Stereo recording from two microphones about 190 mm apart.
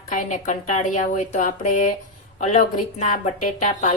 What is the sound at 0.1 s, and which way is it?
A woman's voice, 40° left (ahead or behind).